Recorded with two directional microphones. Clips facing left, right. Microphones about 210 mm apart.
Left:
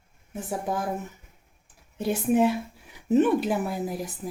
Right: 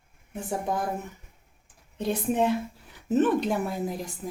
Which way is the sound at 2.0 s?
5° left (ahead or behind).